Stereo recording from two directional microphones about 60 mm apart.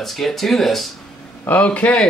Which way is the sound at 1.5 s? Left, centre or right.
Left.